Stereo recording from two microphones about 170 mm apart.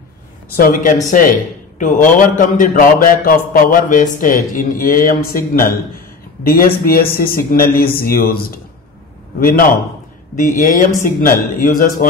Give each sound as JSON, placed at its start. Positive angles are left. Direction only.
{"t": 0.6, "sound": "a man's voice", "side_deg": 55}